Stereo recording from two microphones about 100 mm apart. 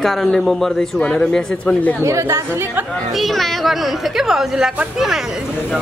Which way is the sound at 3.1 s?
Centre (ahead or behind).